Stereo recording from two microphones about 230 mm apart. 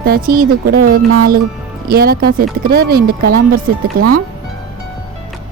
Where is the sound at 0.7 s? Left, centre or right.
Right.